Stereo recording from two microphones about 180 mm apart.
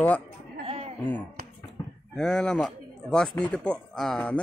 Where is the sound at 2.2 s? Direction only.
5° left (ahead or behind).